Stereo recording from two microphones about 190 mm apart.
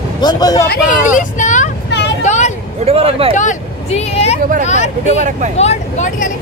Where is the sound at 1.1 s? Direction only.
40° left (ahead or behind).